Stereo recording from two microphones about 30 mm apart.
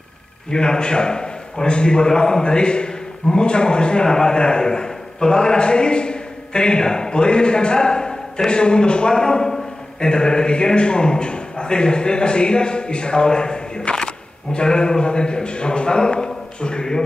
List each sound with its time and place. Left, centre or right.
0.5 s a man's voice: left